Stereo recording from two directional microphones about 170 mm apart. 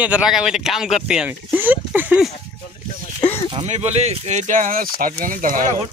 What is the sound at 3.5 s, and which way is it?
Speech, 35° right (ahead or behind).